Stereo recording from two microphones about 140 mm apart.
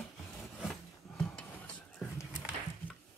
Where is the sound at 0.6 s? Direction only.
Centre (ahead or behind).